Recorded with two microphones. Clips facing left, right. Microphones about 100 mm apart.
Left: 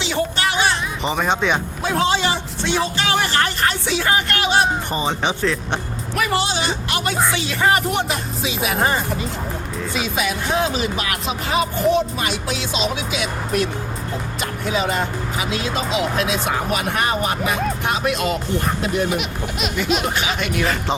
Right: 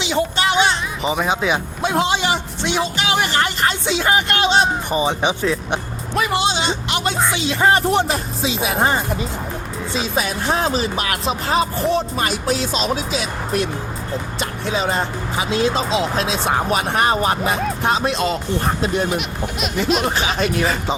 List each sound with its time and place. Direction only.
0.0 s music: 20° right (ahead or behind)
1.0 s speech: 5° right (ahead or behind)
1.8 s a man's voice: 20° right (ahead or behind)
7.6 s speech: 30° right (ahead or behind)
14.3 s music: 30° right (ahead or behind)
15.4 s a man's voice: 30° right (ahead or behind)
19.1 s speech: centre (ahead or behind)
20.4 s speech: 30° right (ahead or behind)